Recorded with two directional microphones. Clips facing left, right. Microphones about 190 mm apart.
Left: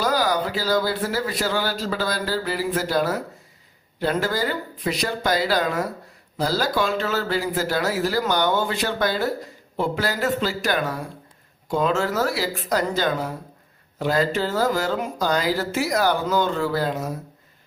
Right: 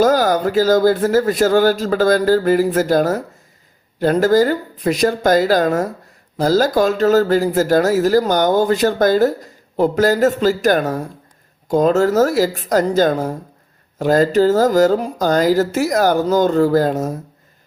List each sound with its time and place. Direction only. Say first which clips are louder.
0.0 s speech: right 8 dB; 45° right (ahead or behind)